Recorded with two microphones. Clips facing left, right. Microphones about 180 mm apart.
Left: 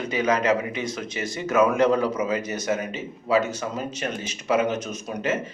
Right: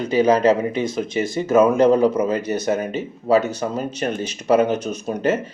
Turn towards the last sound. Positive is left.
turn(degrees=-35)  # may be behind; listen again after turning